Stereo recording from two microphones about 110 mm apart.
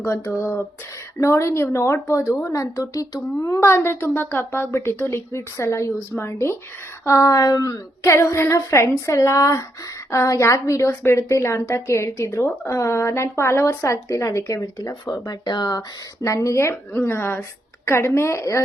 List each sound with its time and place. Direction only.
0.0 s a woman's voice: 25° left (ahead or behind)